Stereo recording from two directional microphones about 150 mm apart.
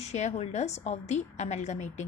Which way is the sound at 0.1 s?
50° left (ahead or behind).